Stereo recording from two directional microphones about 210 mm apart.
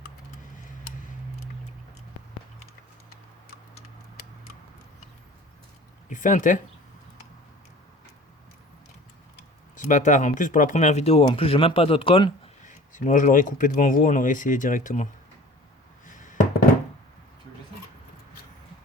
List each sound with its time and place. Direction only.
6.1 s speech: 35° left (ahead or behind)
9.7 s speech: 35° left (ahead or behind)
12.9 s speech: 35° left (ahead or behind)
16.0 s a sound: 35° left (ahead or behind)